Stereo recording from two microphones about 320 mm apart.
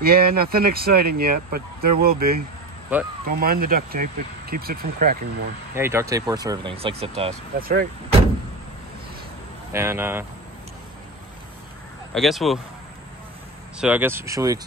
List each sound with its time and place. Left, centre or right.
0.0 s speech: right
2.9 s speech: centre
3.3 s speech: right
5.8 s speech: centre; by 8.2 s right
9.7 s speech: centre
12.1 s speech: centre
13.7 s speech: centre